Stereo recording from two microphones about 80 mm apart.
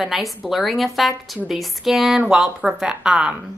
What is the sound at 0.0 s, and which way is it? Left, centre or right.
A woman's voice, centre.